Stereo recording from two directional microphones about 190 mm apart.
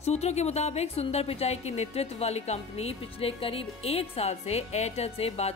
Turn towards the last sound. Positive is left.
turn(degrees=30)  # may be behind; listen again after turning